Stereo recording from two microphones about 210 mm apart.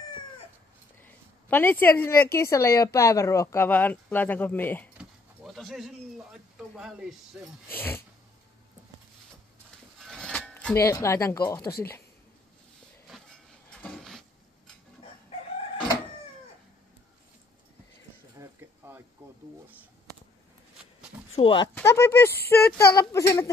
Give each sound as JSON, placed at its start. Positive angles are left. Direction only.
{"t": 1.0, "sound": "a sound", "side_deg": 10}
{"t": 2.3, "sound": "speech", "side_deg": 15}
{"t": 4.9, "sound": "pigeon", "side_deg": 0}
{"t": 7.7, "sound": "speech", "side_deg": 10}
{"t": 9.9, "sound": "a sound", "side_deg": 0}
{"t": 13.7, "sound": "dishes", "side_deg": 5}
{"t": 18.4, "sound": "a sound", "side_deg": -10}
{"t": 21.4, "sound": "speech", "side_deg": 25}
{"t": 21.7, "sound": "speech", "side_deg": 10}